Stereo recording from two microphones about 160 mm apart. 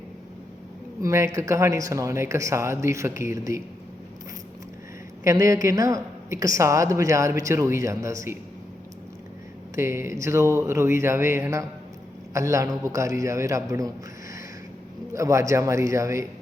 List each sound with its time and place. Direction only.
1.0 s speech: 20° right (ahead or behind)
5.2 s a woman's voice: 20° right (ahead or behind)
9.7 s a woman's voice: 15° right (ahead or behind)
15.1 s a woman's voice: 20° right (ahead or behind)